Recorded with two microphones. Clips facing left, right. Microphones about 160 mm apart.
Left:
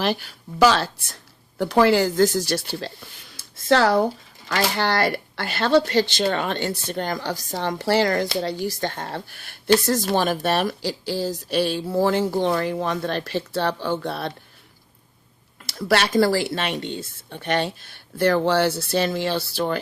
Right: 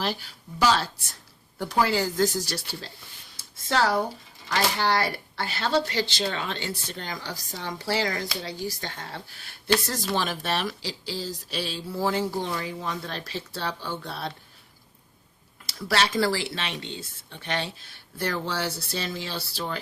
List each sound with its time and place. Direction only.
0.0 s speech: 65° left (ahead or behind)
1.5 s speech: 80° left
3.7 s speech: 70° left (ahead or behind)
4.4 s speech: 60° left (ahead or behind)
9.8 s speech: 45° left (ahead or behind)
15.7 s speech: 55° left (ahead or behind)
16.0 s speech: 40° left (ahead or behind)
18.2 s speech: 65° left (ahead or behind)